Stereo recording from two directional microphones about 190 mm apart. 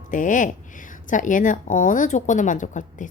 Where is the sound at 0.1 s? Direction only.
45° left (ahead or behind).